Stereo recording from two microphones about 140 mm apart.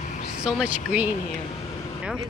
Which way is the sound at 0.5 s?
Centre (ahead or behind).